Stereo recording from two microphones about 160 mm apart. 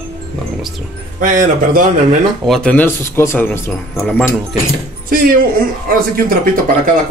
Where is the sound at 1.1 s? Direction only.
55° right (ahead or behind).